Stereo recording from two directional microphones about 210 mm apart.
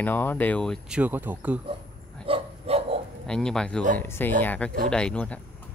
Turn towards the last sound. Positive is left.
turn(degrees=5)  # may be behind; listen again after turning